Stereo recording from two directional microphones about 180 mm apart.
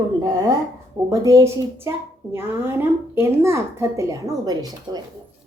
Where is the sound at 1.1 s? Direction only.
20° right (ahead or behind).